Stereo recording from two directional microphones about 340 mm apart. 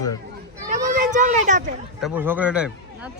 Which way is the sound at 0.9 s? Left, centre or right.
Right.